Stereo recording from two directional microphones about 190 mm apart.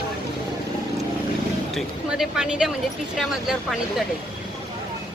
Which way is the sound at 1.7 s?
5° right (ahead or behind).